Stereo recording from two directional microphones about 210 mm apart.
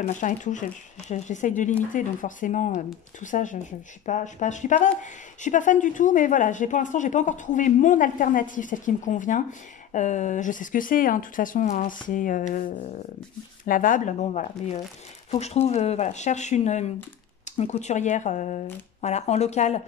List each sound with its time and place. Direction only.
0.0 s speech: 35° left (ahead or behind)